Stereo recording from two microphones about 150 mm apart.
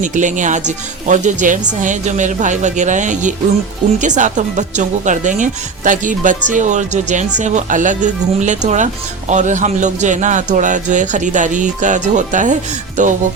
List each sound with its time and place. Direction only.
0.0 s speech: 55° right (ahead or behind)